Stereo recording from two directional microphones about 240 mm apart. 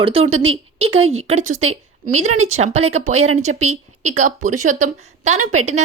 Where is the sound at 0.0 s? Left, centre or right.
Right.